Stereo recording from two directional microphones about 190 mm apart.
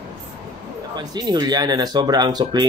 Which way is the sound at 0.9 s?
20° right (ahead or behind).